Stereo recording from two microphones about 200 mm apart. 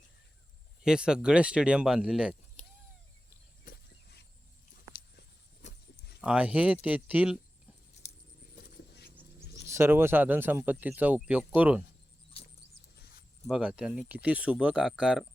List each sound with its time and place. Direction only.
0.8 s speech: 5° right (ahead or behind)
2.6 s a sound: 35° left (ahead or behind)
3.6 s a sound: 55° left (ahead or behind)
5.6 s wild animals: 35° left (ahead or behind)
6.2 s speech: 5° right (ahead or behind)
8.0 s keys jangling: 35° left (ahead or behind)
9.6 s speech: 10° right (ahead or behind)
13.5 s speech: 5° right (ahead or behind)